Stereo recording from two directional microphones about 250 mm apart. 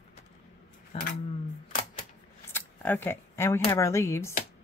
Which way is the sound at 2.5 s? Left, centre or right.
Centre.